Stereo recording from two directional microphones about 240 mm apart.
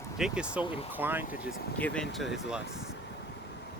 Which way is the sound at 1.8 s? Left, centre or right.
Centre.